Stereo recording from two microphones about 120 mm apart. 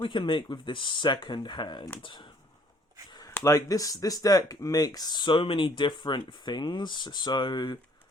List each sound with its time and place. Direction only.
0.0 s speech: 45° left (ahead or behind)
3.2 s speech: 25° left (ahead or behind)